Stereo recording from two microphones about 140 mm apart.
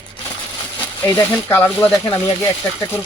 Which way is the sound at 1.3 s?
15° left (ahead or behind).